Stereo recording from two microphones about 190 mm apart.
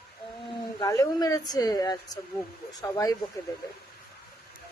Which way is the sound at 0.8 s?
20° left (ahead or behind).